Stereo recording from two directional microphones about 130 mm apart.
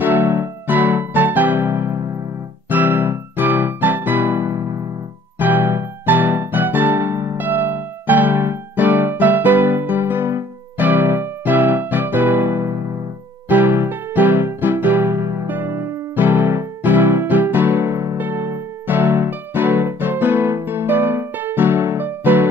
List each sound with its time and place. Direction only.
0.0 s music: 15° right (ahead or behind)